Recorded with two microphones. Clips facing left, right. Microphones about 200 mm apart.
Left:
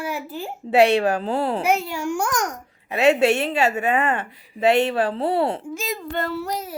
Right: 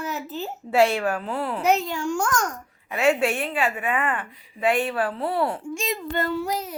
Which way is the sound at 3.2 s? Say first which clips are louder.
Left 6 dB; 75° left (ahead or behind).